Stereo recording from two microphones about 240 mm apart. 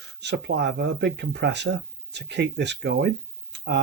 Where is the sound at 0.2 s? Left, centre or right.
Right.